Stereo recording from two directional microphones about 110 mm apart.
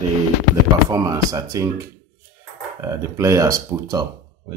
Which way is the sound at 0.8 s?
35° right (ahead or behind).